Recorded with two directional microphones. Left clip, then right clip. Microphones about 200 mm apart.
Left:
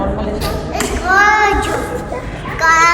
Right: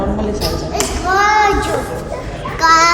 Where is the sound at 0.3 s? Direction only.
65° right (ahead or behind).